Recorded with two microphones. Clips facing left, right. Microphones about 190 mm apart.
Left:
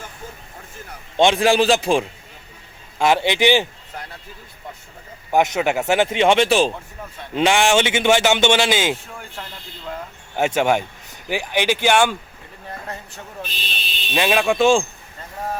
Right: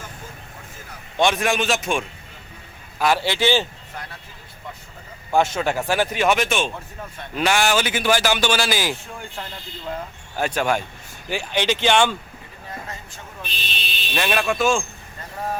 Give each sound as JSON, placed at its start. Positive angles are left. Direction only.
{"t": 1.1, "sound": "a man's voice", "side_deg": 20}
{"t": 3.0, "sound": "speech", "side_deg": 20}
{"t": 5.3, "sound": "speech", "side_deg": 20}
{"t": 10.3, "sound": "speech", "side_deg": 20}
{"t": 14.1, "sound": "speech", "side_deg": 15}